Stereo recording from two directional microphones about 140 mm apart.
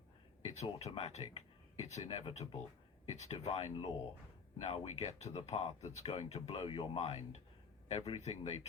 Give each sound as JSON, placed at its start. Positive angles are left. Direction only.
{"t": 0.5, "sound": "speech", "side_deg": 50}